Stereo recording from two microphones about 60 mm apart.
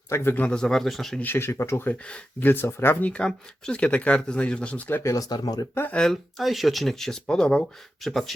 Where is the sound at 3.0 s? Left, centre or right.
Left.